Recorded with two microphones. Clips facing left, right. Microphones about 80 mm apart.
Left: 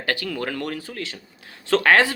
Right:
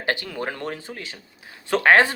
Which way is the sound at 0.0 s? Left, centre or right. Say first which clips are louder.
Even; right.